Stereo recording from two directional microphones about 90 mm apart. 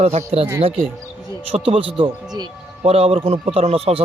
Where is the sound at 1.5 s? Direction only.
90° right.